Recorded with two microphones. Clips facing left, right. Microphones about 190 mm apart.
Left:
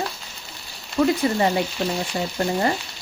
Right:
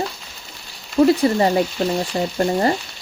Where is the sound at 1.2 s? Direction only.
30° right (ahead or behind).